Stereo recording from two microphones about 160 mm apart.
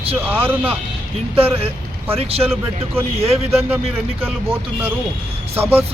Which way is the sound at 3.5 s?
10° right (ahead or behind).